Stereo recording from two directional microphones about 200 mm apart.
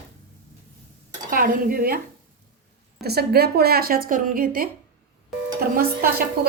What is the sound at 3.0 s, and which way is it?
A woman's voice, 50° right (ahead or behind).